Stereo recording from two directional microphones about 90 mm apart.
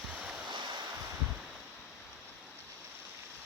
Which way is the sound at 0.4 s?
60° right (ahead or behind).